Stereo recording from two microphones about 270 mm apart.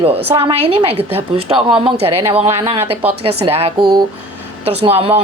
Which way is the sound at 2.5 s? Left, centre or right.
Centre.